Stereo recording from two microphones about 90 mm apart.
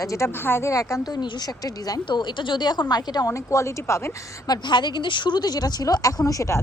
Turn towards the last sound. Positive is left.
turn(degrees=35)  # may be behind; listen again after turning